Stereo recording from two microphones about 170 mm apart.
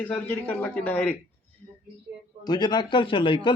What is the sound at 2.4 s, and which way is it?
A man's voice, 25° left (ahead or behind).